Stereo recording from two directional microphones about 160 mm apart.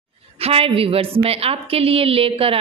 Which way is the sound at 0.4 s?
35° right (ahead or behind).